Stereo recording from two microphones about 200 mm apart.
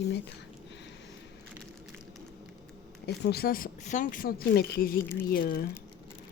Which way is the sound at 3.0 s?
55° left (ahead or behind).